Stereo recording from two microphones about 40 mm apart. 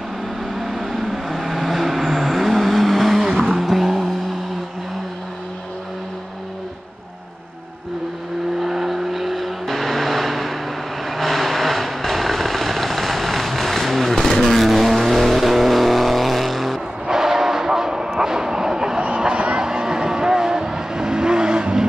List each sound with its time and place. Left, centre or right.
0.6 s vehicle: centre
8.5 s vehicle: centre
17.1 s a sound: centre